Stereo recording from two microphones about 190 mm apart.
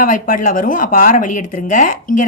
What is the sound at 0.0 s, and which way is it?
A woman's voice, 45° left (ahead or behind).